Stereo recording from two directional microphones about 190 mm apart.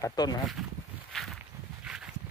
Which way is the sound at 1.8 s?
5° right (ahead or behind).